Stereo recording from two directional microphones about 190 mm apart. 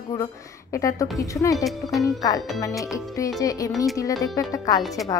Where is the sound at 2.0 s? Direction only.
20° left (ahead or behind).